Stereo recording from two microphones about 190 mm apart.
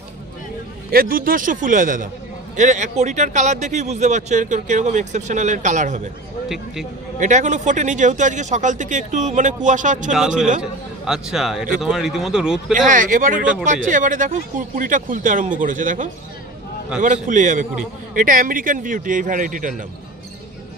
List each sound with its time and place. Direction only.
0.9 s a man's voice: 50° right (ahead or behind)
6.5 s a man's voice: centre (ahead or behind)
7.2 s a man's voice: 40° right (ahead or behind)
10.6 s a man's voice: 5° right (ahead or behind)
12.7 s a man's voice: 45° right (ahead or behind)